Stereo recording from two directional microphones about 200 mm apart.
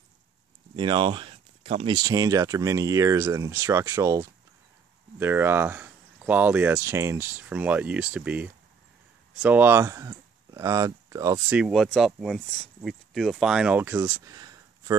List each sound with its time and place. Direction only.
0.7 s speech: 25° right (ahead or behind)
2.0 s speech: 20° right (ahead or behind)
11.5 s speech: centre (ahead or behind); by 15.0 s 20° right (ahead or behind)